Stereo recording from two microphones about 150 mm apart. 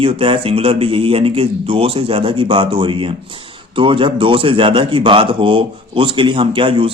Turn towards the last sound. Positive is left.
turn(degrees=-35)  # may be behind; listen again after turning